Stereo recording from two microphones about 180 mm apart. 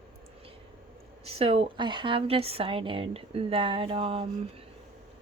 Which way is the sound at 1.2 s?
35° right (ahead or behind).